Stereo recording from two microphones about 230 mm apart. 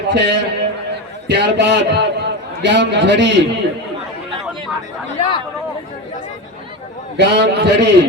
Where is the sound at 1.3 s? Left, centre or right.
Right.